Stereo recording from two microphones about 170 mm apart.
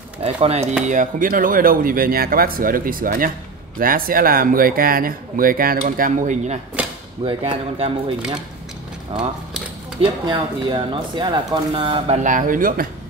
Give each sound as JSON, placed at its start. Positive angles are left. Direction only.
{"t": 0.2, "sound": "speech", "side_deg": -35}
{"t": 0.8, "sound": "speech", "side_deg": -50}
{"t": 7.2, "sound": "speech", "side_deg": -30}
{"t": 10.0, "sound": "speech", "side_deg": -30}
{"t": 12.2, "sound": "speech", "side_deg": -50}